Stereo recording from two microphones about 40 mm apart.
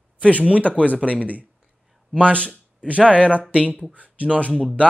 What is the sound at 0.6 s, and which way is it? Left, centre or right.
Speech, left.